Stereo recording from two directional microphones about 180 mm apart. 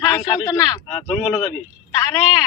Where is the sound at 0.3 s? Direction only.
20° left (ahead or behind).